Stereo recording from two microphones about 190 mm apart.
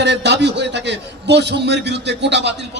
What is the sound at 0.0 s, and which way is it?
A man's voice, 65° right (ahead or behind).